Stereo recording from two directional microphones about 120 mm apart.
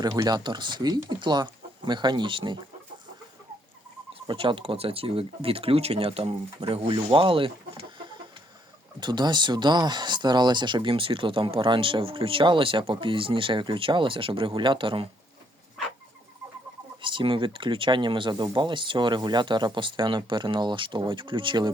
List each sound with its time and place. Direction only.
0.0 s speech: 30° right (ahead or behind)
4.1 s speech: 50° right (ahead or behind)
17.0 s speech: 45° right (ahead or behind)